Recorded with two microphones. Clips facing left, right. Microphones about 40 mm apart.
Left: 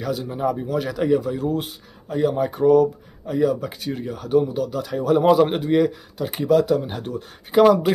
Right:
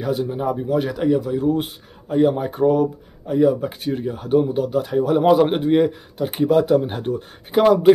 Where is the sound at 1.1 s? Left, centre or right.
Centre.